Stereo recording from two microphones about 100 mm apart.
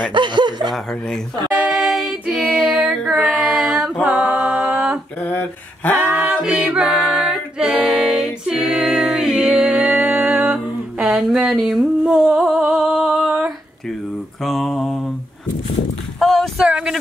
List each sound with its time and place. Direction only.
0.1 s speech: 50° right (ahead or behind)
1.7 s singing: centre (ahead or behind)
2.2 s child singing: 5° right (ahead or behind)
4.0 s a capella: 15° right (ahead or behind)
5.9 s singing: 20° right (ahead or behind)
14.4 s mantra: centre (ahead or behind)
16.2 s a sound: 5° left (ahead or behind)
16.6 s a sound: 10° right (ahead or behind)